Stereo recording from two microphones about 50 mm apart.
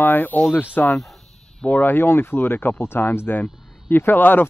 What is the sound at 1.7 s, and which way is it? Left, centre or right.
Speech, left.